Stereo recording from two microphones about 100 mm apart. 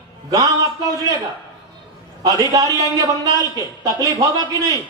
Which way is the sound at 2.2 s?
35° right (ahead or behind).